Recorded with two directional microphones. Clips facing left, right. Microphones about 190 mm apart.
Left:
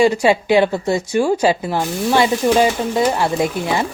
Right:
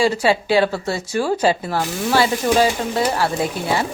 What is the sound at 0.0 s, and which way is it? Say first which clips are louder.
Speech: left 3 dB; 15° left (ahead or behind).